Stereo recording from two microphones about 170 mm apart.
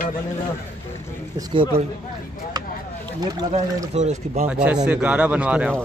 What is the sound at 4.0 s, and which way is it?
Speech, 40° right (ahead or behind).